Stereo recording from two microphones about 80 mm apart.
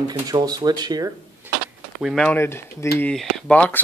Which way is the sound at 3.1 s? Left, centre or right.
Centre.